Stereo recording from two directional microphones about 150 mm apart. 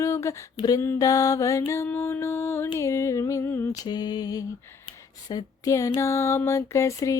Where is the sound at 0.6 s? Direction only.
20° left (ahead or behind).